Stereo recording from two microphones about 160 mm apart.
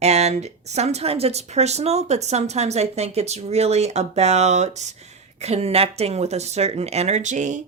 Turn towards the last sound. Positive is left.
turn(degrees=-50)  # may be behind; listen again after turning